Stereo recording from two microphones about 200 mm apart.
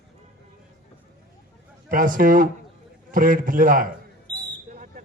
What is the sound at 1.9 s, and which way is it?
A man's voice, 45° right (ahead or behind).